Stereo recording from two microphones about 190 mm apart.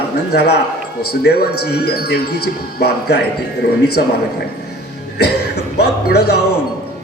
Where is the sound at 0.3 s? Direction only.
60° left (ahead or behind).